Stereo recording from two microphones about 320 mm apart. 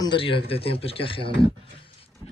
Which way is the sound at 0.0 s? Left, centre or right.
Centre.